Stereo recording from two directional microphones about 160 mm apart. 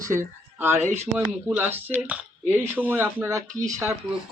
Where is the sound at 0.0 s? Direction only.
15° right (ahead or behind).